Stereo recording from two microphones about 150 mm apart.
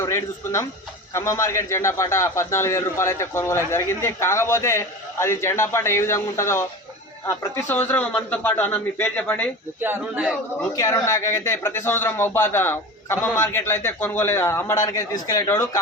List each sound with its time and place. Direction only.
0.0 s a man's voice: 20° left (ahead or behind)
9.8 s speech: 15° right (ahead or behind)
10.8 s a man's voice: 20° left (ahead or behind)